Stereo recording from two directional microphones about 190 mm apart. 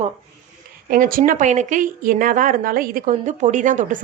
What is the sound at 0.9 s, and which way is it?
A woman's voice, 45° right (ahead or behind).